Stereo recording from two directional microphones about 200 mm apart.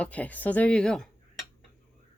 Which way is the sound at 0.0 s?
5° left (ahead or behind).